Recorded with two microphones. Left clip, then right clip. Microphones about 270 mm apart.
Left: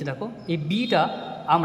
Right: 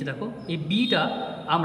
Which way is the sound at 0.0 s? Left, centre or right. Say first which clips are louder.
Left 1 dB; centre.